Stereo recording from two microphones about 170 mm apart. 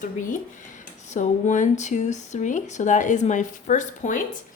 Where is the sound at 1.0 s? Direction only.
45° left (ahead or behind).